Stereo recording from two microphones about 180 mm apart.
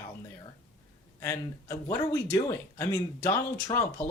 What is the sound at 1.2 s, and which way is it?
Speech, 15° left (ahead or behind).